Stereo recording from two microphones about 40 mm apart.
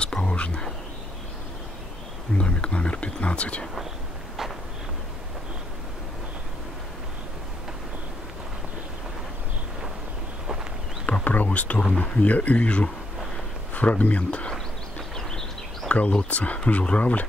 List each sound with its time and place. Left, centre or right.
0.0 s whispering: left
2.3 s speech: left
11.2 s a sound: left
12.0 s speech: left
15.1 s a sound: centre
15.9 s speech: left